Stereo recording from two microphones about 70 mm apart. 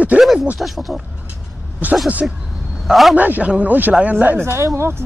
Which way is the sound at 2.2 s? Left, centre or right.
Centre.